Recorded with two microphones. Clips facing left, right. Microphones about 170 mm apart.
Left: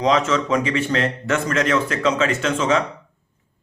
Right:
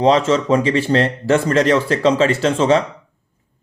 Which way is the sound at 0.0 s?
30° right (ahead or behind).